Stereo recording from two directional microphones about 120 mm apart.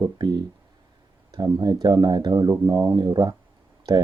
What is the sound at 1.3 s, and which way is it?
Speech, 35° right (ahead or behind).